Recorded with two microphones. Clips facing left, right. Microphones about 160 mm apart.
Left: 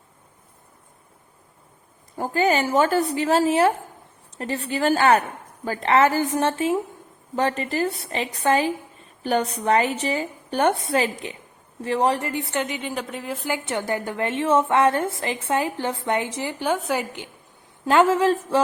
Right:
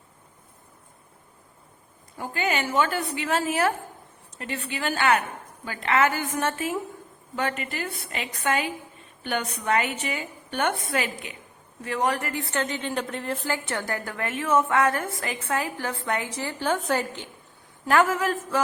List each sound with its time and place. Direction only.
2.1 s a woman's voice: 40° left (ahead or behind); by 17.2 s 10° left (ahead or behind)
17.8 s a woman's voice: 25° left (ahead or behind)